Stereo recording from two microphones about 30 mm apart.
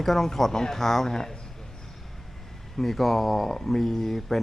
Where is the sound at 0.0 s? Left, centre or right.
Centre.